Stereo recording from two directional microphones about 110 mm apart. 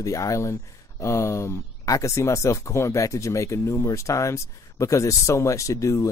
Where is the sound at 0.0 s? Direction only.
30° left (ahead or behind).